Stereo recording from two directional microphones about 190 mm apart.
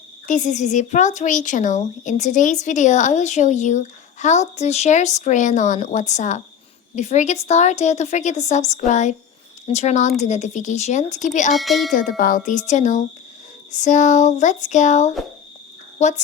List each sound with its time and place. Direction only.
0.3 s speech: 40° left (ahead or behind)
11.5 s speech: centre (ahead or behind)
11.9 s a child's voice: 45° left (ahead or behind)